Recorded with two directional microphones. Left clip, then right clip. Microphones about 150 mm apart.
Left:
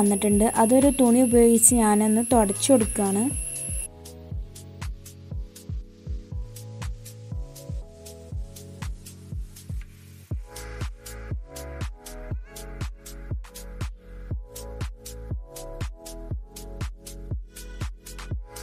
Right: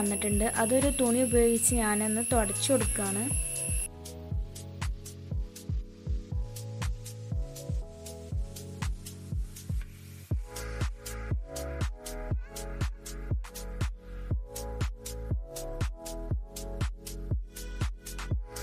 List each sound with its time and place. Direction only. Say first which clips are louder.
0.0 s a woman's voice: left 9 dB; 15° left (ahead or behind)
3.5 s music: even; 5° right (ahead or behind)
6.8 s music: right 1 dB; centre (ahead or behind)
8.5 s music: right 1 dB; centre (ahead or behind)
10.2 s music: even; 5° right (ahead or behind)